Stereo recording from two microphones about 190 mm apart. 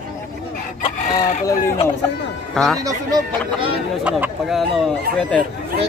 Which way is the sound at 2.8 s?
20° right (ahead or behind).